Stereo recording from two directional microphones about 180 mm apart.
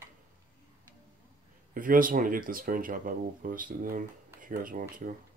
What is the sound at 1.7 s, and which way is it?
Speech, 50° right (ahead or behind).